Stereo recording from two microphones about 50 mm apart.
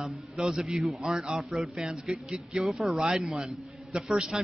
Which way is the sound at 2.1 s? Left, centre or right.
Centre.